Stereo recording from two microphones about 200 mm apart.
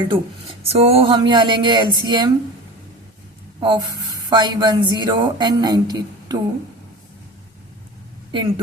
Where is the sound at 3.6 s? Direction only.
20° right (ahead or behind).